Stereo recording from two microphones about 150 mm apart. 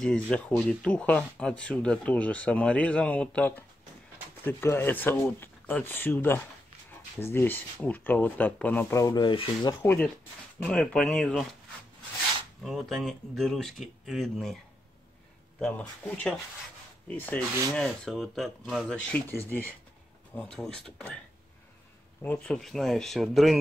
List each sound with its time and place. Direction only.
0.0 s speech: 5° left (ahead or behind)
9.0 s speech: 30° left (ahead or behind)
9.8 s speech: 10° left (ahead or behind)
12.6 s speech: centre (ahead or behind)
15.6 s speech: 10° left (ahead or behind)
17.7 s speech: 5° left (ahead or behind)
22.2 s speech: 10° left (ahead or behind)